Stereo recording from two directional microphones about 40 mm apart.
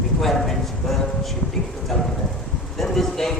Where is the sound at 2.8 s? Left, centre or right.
Centre.